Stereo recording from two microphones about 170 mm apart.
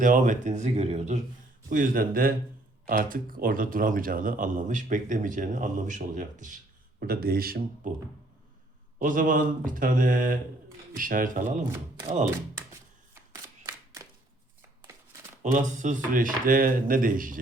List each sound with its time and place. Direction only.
0.0 s speech: 50° right (ahead or behind)
1.7 s speech: 50° right (ahead or behind)
7.0 s speech: 60° right (ahead or behind)
7.9 s speech: 50° right (ahead or behind)
13.7 s a sound: 20° right (ahead or behind)
15.5 s speech: 45° right (ahead or behind)